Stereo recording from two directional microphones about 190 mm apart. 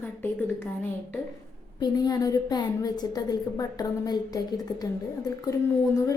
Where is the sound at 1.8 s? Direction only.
20° left (ahead or behind).